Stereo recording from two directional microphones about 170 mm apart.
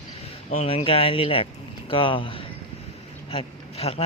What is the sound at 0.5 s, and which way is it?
Speech, 40° left (ahead or behind).